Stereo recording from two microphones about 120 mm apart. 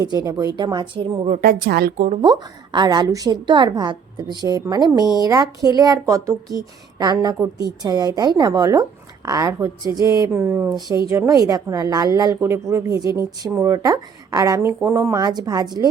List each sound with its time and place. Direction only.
0.0 s a woman's voice: 35° right (ahead or behind)